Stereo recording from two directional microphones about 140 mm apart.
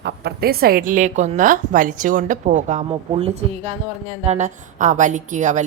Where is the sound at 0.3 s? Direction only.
90° right.